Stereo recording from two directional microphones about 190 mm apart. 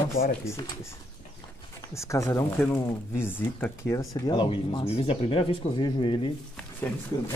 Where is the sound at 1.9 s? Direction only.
15° left (ahead or behind).